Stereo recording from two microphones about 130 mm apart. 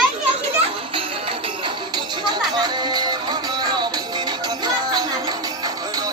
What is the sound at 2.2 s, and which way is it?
Music, 35° right (ahead or behind).